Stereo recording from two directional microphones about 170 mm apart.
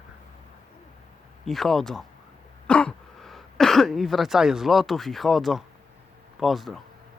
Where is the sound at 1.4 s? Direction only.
Centre (ahead or behind).